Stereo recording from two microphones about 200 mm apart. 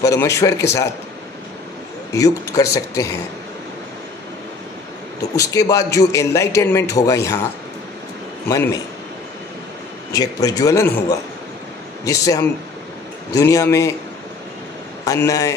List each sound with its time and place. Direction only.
0.0 s a man's voice: 15° left (ahead or behind)
2.1 s a man's voice: 15° left (ahead or behind)
5.3 s a man's voice: 15° left (ahead or behind)
10.1 s a man's voice: 20° left (ahead or behind)
15.0 s a man's voice: 15° left (ahead or behind)